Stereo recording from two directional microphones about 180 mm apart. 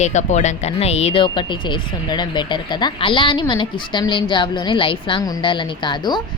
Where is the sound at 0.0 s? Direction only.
40° left (ahead or behind).